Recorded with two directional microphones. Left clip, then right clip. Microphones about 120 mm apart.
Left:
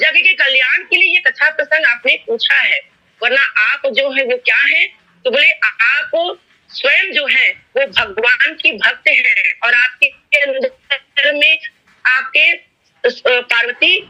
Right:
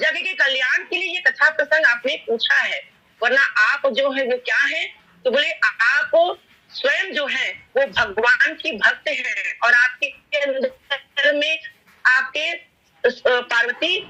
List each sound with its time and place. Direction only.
0.3 s a woman's voice: 35° left (ahead or behind)
13.1 s a woman's voice: 30° left (ahead or behind)